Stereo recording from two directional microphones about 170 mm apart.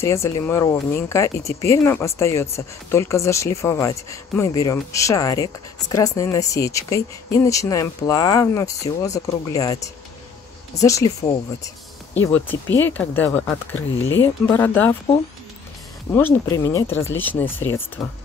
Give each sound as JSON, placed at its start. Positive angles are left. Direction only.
{"t": 0.0, "sound": "speech", "side_deg": 15}
{"t": 10.8, "sound": "speech", "side_deg": 20}
{"t": 16.1, "sound": "speech", "side_deg": 10}